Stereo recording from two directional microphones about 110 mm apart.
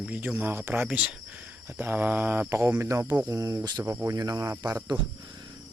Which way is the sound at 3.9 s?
25° right (ahead or behind).